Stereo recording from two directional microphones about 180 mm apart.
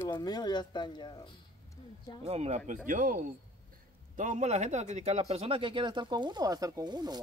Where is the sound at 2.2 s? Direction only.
35° right (ahead or behind).